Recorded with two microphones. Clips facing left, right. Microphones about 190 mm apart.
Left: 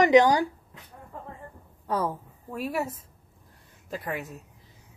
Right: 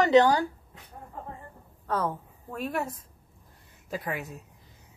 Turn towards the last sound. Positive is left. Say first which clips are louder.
# even
turn(degrees=0)  # may be behind; listen again after turning